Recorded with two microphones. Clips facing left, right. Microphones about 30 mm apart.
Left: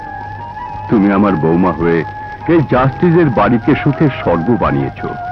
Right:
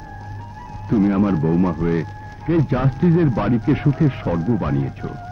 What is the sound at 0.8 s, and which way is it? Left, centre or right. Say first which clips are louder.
A man's voice: left 7 dB; left.